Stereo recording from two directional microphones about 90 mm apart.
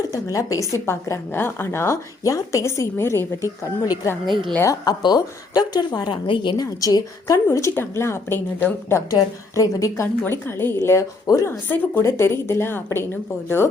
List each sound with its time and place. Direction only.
0.1 s a woman's voice: 40° left (ahead or behind)
4.3 s a woman's voice: 60° right (ahead or behind)
4.6 s speech: 45° left (ahead or behind); by 6.6 s 65° left (ahead or behind)
6.6 s speech: 40° left (ahead or behind)
7.3 s a woman's voice: 30° left (ahead or behind)
9.0 s a woman's voice: 40° left (ahead or behind)